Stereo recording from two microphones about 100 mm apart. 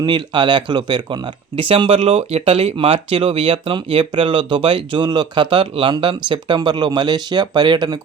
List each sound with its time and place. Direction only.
0.0 s speech: 50° right (ahead or behind)